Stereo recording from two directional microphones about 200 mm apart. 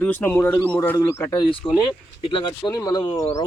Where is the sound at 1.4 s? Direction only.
25° left (ahead or behind).